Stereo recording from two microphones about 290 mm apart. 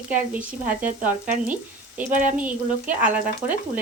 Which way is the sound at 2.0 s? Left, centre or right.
Right.